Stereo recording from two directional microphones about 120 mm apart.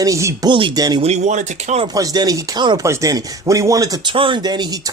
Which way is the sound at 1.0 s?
70° right (ahead or behind).